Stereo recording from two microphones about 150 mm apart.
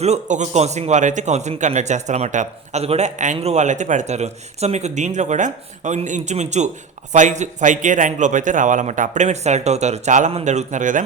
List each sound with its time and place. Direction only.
0.0 s a man's voice: 50° right (ahead or behind)